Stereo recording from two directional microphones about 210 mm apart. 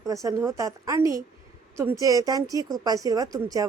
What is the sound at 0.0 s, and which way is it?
A woman's voice, 15° right (ahead or behind).